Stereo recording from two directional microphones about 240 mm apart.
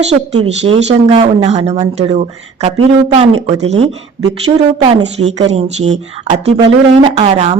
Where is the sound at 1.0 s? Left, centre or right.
Right.